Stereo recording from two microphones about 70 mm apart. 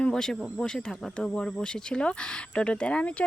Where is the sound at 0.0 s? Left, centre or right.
Centre.